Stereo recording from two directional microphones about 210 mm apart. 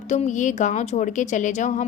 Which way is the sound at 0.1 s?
35° left (ahead or behind).